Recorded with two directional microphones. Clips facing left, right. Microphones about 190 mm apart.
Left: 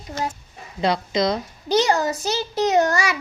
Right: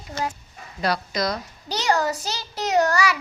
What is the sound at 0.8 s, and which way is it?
A child's voice, 25° left (ahead or behind).